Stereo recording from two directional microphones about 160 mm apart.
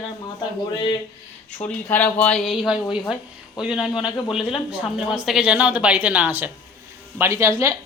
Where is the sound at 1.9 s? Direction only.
10° left (ahead or behind); by 7.7 s 15° right (ahead or behind).